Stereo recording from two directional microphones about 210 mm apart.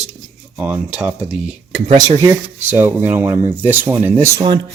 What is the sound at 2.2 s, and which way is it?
Speech, 10° right (ahead or behind).